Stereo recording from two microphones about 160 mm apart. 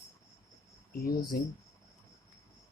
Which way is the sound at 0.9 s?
75° left (ahead or behind).